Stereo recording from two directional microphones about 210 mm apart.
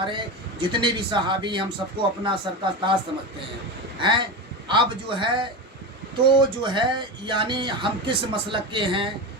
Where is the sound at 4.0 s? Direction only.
20° right (ahead or behind).